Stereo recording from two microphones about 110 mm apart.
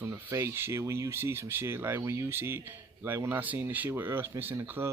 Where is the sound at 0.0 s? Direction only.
25° right (ahead or behind).